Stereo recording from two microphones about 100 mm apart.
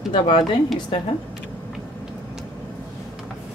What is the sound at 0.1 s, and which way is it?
Speech, 55° left (ahead or behind).